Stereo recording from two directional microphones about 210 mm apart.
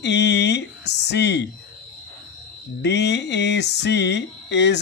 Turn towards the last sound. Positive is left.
turn(degrees=55)  # may be behind; listen again after turning